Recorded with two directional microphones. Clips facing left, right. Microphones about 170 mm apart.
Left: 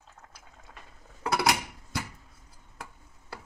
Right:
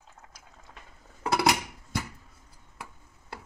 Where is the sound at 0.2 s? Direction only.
5° right (ahead or behind).